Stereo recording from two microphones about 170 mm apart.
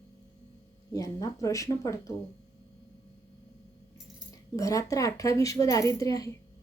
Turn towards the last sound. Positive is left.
turn(degrees=20)  # may be behind; listen again after turning